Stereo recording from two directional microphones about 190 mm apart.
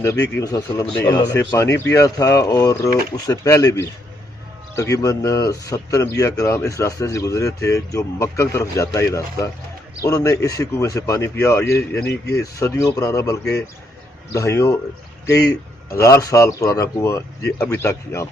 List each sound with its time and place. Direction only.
0.0 s speech: 15° left (ahead or behind)
12.0 s speech: 60° left (ahead or behind)
12.3 s speech: 15° left (ahead or behind)
15.9 s speech: 15° left (ahead or behind)